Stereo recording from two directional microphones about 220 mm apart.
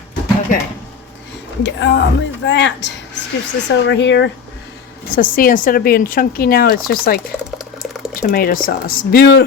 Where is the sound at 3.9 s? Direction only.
55° left (ahead or behind).